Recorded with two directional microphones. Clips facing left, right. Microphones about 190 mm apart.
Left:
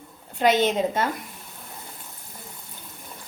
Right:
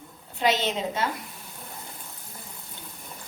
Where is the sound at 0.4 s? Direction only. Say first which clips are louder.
Left 5 dB; 50° left (ahead or behind).